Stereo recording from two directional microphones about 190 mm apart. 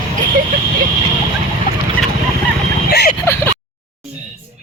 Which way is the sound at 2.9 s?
50° left (ahead or behind).